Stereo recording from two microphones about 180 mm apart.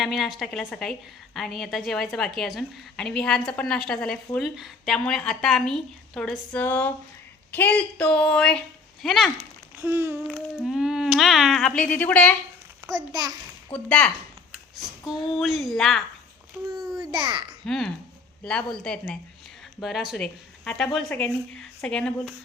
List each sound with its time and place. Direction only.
0.0 s a woman's voice: centre (ahead or behind)
9.4 s a sound: 15° right (ahead or behind)
10.2 s a woman's voice: centre (ahead or behind)
13.7 s a woman's voice: 5° left (ahead or behind)
17.0 s a child's voice: 25° right (ahead or behind)
17.7 s a woman's voice: 5° left (ahead or behind)